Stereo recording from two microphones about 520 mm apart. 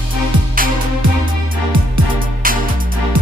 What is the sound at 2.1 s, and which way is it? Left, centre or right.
Music, centre.